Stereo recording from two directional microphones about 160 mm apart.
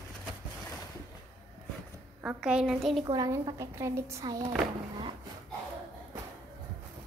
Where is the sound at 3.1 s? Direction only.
25° right (ahead or behind).